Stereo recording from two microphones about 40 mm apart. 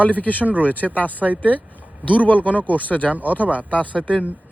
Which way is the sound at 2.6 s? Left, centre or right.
Left.